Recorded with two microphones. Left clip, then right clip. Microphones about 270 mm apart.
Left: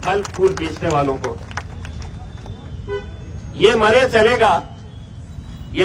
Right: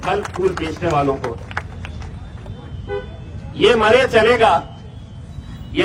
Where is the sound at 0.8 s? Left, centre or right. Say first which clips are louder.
Right 1 dB; left.